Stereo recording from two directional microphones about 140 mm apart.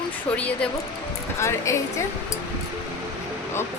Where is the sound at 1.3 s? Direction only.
20° left (ahead or behind).